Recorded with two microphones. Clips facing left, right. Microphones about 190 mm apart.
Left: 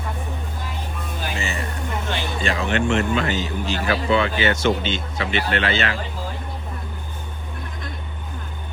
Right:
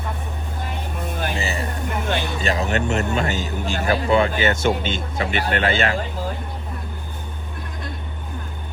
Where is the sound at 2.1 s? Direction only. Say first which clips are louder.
Right 2 dB; 40° right (ahead or behind).